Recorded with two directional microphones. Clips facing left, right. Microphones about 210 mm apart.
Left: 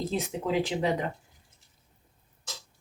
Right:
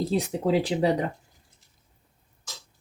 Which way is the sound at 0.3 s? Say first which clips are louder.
Right 4 dB; 35° right (ahead or behind).